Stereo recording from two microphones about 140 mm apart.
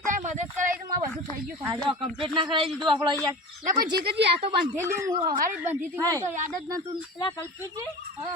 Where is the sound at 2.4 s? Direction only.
35° right (ahead or behind).